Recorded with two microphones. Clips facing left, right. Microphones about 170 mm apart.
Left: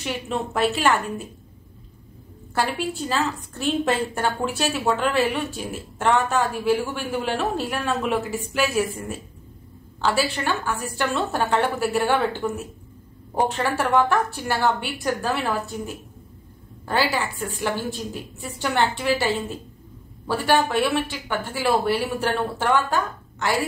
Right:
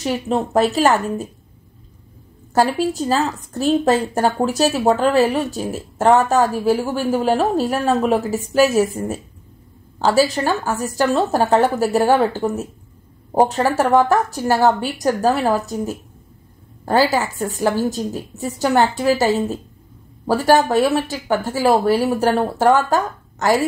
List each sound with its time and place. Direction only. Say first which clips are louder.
0.0 s a woman's voice: right 7 dB; 40° right (ahead or behind)
2.5 s a woman's voice: right 8 dB; 40° right (ahead or behind)